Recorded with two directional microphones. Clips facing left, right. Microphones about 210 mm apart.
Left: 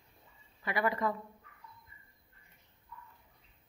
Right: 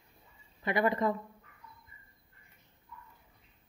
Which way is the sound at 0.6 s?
20° right (ahead or behind).